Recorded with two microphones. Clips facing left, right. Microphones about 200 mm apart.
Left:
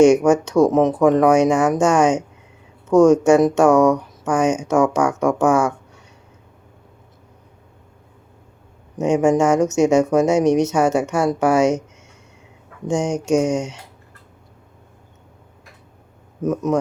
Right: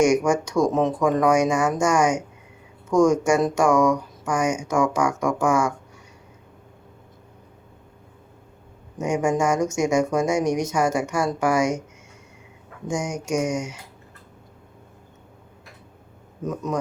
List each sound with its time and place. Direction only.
0.0 s speech: 25° left (ahead or behind)
9.0 s speech: 25° left (ahead or behind)
12.9 s speech: 25° left (ahead or behind)
16.4 s speech: 20° left (ahead or behind)